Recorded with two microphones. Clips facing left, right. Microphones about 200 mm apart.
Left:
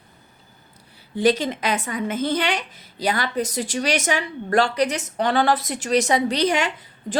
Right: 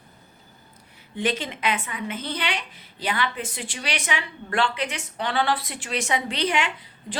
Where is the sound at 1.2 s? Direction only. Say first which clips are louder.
Left 7 dB; 40° left (ahead or behind).